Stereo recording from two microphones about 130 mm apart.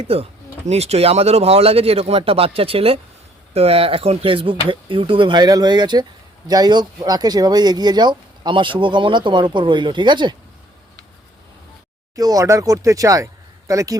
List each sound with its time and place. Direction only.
0.0 s speech: 50° right (ahead or behind)
12.1 s speech: 30° right (ahead or behind)